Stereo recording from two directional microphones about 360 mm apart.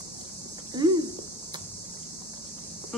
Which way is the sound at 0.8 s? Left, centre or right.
Centre.